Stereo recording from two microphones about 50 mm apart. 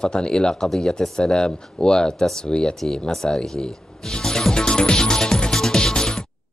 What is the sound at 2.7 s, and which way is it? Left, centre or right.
Speech, centre.